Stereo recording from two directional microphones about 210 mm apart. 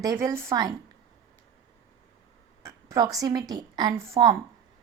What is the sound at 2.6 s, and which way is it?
A woman's voice, 15° right (ahead or behind).